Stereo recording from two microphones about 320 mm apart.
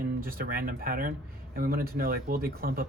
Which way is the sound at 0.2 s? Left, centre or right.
Right.